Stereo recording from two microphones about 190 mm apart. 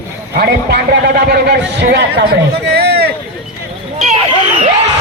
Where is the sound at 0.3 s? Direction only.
55° right (ahead or behind).